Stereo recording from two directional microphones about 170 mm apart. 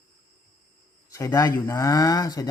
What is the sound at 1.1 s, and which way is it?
Speech, 20° left (ahead or behind).